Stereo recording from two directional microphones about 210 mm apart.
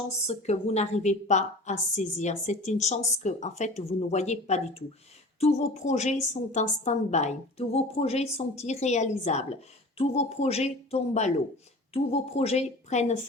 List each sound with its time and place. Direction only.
0.3 s a woman's voice: 30° left (ahead or behind)